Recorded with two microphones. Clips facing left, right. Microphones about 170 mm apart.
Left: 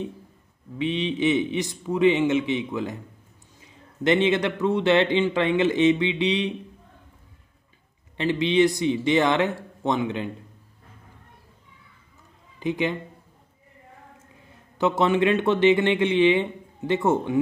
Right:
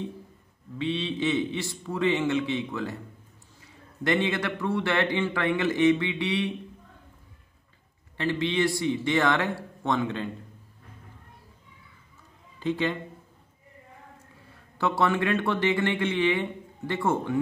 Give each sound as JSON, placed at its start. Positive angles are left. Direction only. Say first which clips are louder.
{"t": 0.7, "sound": "a man's voice", "louder": "left 3 dB", "side_deg": 20}
{"t": 8.2, "sound": "a man's voice", "louder": "left 6 dB", "side_deg": 20}
{"t": 12.5, "sound": "a man's voice", "louder": "left 2 dB", "side_deg": 15}
{"t": 14.3, "sound": "a man's voice", "louder": "left 1 dB", "side_deg": 20}